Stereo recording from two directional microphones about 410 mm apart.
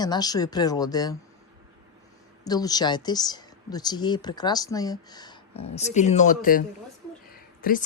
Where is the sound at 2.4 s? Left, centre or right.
Centre.